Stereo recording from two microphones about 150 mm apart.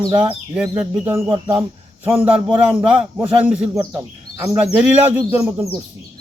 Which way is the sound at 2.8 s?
10° right (ahead or behind).